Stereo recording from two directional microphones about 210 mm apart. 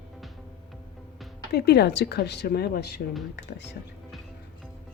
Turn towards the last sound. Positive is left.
turn(degrees=55)  # may be behind; listen again after turning